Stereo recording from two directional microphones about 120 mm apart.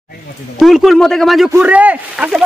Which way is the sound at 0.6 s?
Centre (ahead or behind).